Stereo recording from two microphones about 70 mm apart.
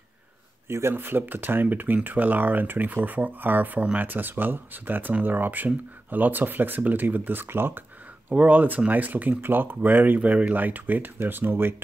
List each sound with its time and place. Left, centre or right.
0.7 s speech: right
8.3 s speech: right